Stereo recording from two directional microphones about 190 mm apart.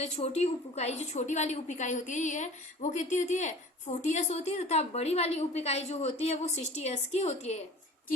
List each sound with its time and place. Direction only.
0.0 s a woman's voice: 35° left (ahead or behind)